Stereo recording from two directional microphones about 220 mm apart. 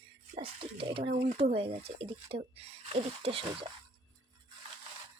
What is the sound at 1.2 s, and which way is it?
Speech, 25° right (ahead or behind).